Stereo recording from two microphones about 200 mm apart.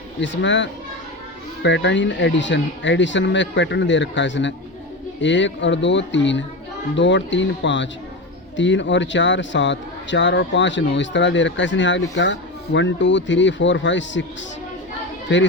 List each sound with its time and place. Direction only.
0.2 s a man's voice: 65° left (ahead or behind)